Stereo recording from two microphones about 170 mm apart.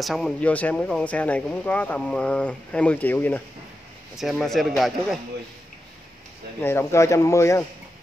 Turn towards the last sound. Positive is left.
turn(degrees=20)  # may be behind; listen again after turning